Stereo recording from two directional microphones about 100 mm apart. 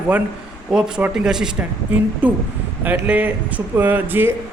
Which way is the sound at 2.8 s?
15° right (ahead or behind).